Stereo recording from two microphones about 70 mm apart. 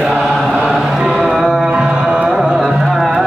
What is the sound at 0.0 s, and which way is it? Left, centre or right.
Chant, centre.